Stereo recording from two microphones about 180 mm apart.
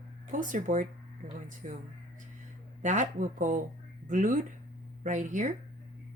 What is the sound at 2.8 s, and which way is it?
Speech, 45° right (ahead or behind).